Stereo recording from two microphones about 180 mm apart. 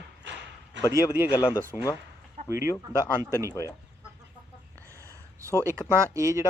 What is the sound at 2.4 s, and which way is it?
A man's voice, 15° right (ahead or behind).